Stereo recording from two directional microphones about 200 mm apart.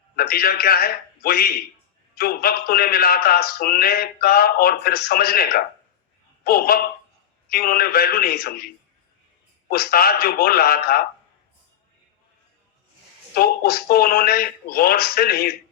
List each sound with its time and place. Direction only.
0.2 s a man's voice: 50° left (ahead or behind)
13.3 s a man's voice: 50° left (ahead or behind)